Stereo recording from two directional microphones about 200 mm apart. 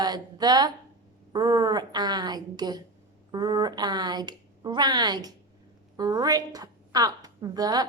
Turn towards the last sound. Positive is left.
turn(degrees=-20)  # may be behind; listen again after turning